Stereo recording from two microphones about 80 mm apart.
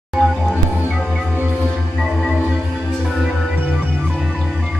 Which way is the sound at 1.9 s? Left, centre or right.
Centre.